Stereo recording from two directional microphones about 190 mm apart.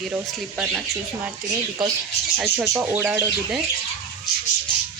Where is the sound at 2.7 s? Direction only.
10° right (ahead or behind).